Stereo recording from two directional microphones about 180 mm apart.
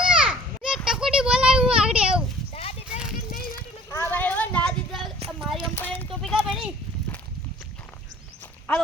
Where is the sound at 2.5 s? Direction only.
35° left (ahead or behind).